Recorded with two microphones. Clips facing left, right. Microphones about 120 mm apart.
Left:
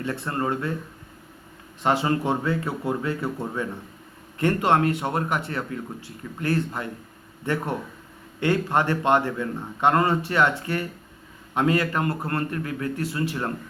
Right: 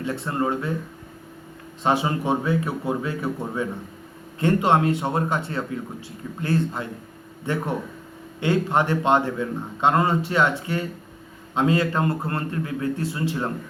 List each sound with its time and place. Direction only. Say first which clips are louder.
0.0 s speech: right 2 dB; 20° right (ahead or behind)
1.8 s speech: even; 15° right (ahead or behind)